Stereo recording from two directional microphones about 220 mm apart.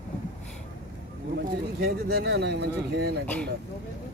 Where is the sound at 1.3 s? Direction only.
45° right (ahead or behind).